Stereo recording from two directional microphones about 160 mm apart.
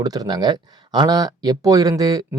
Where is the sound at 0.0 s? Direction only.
25° right (ahead or behind).